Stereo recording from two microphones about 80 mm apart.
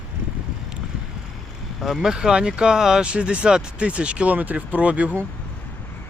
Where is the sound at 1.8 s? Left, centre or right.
Centre.